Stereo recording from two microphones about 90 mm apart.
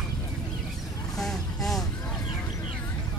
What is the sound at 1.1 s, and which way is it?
Vehicle, 5° left (ahead or behind).